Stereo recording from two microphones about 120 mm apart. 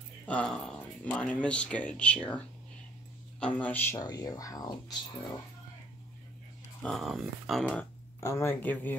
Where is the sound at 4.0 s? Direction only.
35° left (ahead or behind).